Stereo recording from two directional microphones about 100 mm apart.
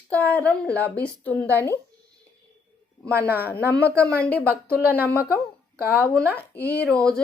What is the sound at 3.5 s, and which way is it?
Speech, 15° left (ahead or behind).